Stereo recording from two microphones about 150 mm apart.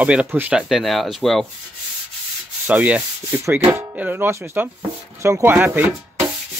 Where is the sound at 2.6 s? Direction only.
10° right (ahead or behind).